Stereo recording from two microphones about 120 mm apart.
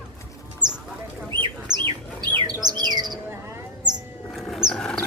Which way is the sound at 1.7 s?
40° right (ahead or behind).